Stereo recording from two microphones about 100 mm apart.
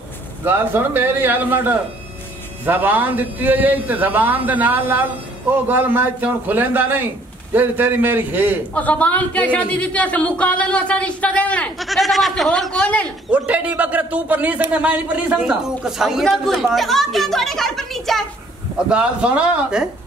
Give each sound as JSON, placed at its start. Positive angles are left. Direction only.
{"t": 0.5, "sound": "a man's voice", "side_deg": -20}
{"t": 8.7, "sound": "speech", "side_deg": 15}
{"t": 11.8, "sound": "speech", "side_deg": 0}
{"t": 13.3, "sound": "a man's voice", "side_deg": -15}
{"t": 18.9, "sound": "a man's voice", "side_deg": -10}